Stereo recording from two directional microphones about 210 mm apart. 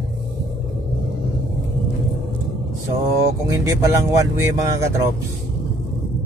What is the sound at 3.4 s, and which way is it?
Speech, 15° right (ahead or behind).